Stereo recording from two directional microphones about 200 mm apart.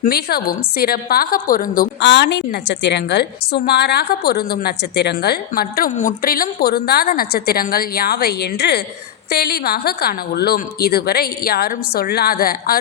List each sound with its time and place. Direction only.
0.0 s a woman's voice: 50° left (ahead or behind)